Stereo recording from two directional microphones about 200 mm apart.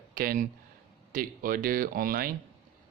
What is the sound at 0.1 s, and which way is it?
Speech, 45° right (ahead or behind).